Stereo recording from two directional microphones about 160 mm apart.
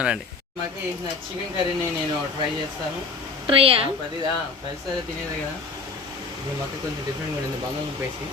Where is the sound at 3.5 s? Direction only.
35° right (ahead or behind).